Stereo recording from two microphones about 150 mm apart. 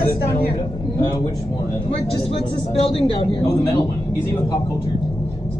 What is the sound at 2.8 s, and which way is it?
Speech, 35° left (ahead or behind).